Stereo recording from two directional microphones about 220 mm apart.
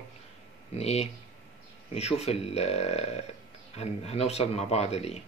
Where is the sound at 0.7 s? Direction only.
30° left (ahead or behind).